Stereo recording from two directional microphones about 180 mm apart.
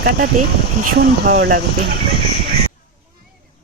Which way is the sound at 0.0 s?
60° right (ahead or behind).